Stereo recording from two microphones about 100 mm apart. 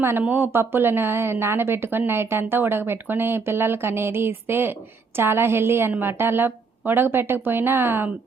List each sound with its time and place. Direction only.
0.0 s a woman's voice: 20° right (ahead or behind)